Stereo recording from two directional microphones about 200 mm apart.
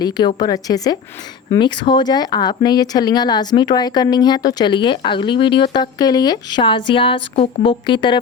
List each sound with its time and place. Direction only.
0.0 s speech: 20° left (ahead or behind)